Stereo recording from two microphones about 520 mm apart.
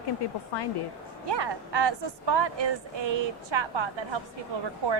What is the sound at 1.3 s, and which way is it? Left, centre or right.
A woman's voice, right.